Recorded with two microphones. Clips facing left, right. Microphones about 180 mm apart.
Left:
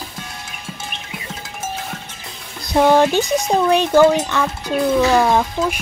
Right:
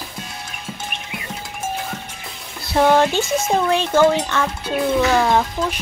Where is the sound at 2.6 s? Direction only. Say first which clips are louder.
Left 2 dB; 10° left (ahead or behind).